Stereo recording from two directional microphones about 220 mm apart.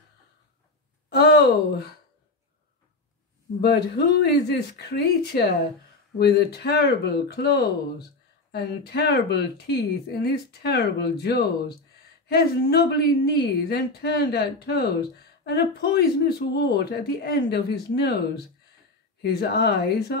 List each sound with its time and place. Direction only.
1.1 s speech: 45° left (ahead or behind)
4.2 s speech: 50° left (ahead or behind)